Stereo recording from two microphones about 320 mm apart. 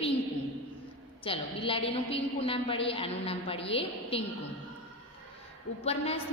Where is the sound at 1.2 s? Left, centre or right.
Centre.